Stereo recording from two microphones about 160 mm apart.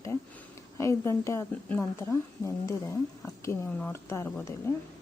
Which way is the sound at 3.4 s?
15° left (ahead or behind).